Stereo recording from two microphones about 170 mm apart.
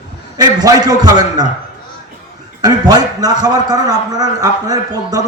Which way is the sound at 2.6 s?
25° right (ahead or behind).